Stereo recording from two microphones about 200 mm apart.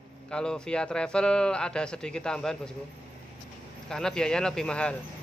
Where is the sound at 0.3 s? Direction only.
5° left (ahead or behind).